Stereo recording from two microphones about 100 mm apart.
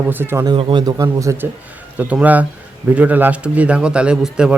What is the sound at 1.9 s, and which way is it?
A man's voice, 15° right (ahead or behind).